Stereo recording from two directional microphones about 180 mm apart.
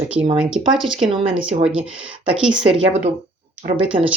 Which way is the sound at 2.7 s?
35° right (ahead or behind).